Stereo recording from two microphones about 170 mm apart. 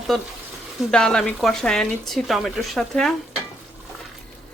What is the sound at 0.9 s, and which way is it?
Speech, 5° left (ahead or behind).